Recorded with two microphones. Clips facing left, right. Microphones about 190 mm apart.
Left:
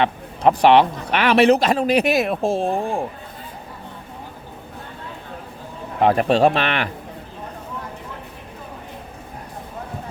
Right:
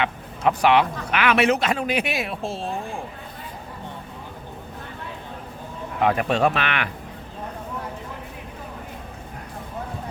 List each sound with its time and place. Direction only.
0.0 s speech: 35° left (ahead or behind); by 3.0 s 55° left (ahead or behind)
6.0 s speech: 35° left (ahead or behind)